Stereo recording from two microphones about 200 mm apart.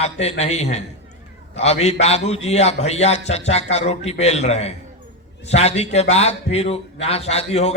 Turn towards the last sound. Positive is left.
turn(degrees=30)  # may be behind; listen again after turning